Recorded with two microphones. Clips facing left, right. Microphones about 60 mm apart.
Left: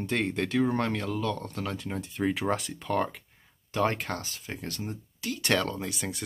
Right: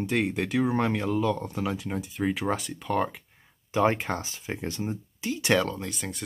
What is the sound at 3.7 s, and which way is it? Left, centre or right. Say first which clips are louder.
Speech: right 4 dB; centre.